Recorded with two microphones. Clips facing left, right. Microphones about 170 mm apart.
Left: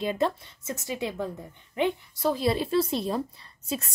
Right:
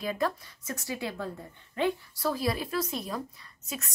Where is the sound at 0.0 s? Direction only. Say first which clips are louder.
Left 4 dB; 25° left (ahead or behind).